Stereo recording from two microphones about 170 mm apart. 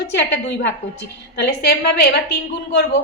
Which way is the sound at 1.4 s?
75° left (ahead or behind).